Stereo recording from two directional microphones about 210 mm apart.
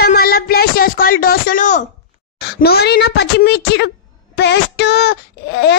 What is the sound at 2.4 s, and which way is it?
A woman's voice, 50° left (ahead or behind).